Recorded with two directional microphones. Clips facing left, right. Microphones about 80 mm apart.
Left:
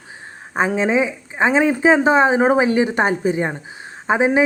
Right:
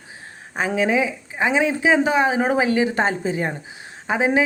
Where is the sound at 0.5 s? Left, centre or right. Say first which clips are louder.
Left 3 dB; left.